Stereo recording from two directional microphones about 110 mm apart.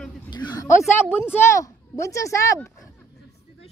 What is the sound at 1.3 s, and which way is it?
Speech, 25° left (ahead or behind).